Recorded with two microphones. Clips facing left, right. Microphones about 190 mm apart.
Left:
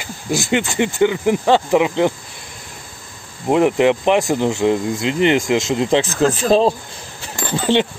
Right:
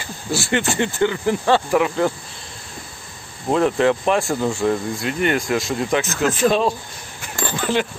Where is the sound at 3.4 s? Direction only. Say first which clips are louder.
Left 3 dB; 20° left (ahead or behind).